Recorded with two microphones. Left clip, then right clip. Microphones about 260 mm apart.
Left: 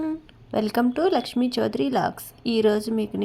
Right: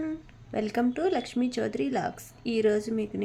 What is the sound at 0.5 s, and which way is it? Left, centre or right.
Speech, centre.